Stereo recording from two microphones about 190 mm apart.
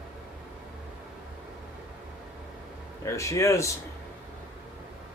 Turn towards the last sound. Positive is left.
turn(degrees=15)  # may be behind; listen again after turning